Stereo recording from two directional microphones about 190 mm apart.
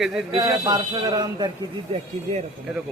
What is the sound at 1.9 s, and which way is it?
Speech, 35° right (ahead or behind).